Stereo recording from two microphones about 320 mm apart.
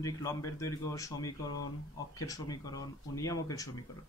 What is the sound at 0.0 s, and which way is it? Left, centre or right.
Speech, centre.